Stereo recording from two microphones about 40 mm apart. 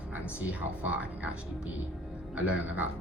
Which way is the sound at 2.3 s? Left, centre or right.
Right.